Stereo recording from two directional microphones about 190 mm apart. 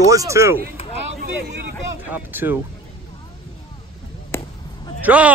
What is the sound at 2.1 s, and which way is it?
Speech, 10° right (ahead or behind).